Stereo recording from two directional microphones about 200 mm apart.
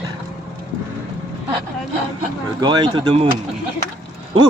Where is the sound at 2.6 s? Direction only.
20° right (ahead or behind).